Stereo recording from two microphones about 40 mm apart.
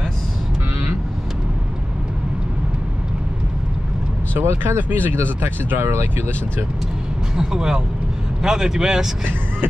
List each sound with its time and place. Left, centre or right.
4.3 s speech: right
4.8 s speech: right
5.1 s speech: right
7.3 s speech: centre